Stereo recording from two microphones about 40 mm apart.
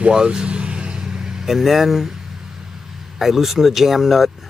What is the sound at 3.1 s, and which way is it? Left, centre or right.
Speech, centre.